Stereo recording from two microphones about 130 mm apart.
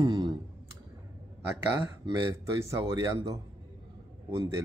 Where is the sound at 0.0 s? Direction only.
30° right (ahead or behind).